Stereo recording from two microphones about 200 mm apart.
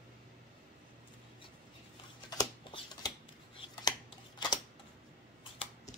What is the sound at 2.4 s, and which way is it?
Shuffling cards, 20° left (ahead or behind).